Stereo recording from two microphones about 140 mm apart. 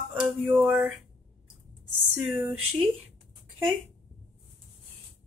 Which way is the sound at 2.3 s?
15° right (ahead or behind).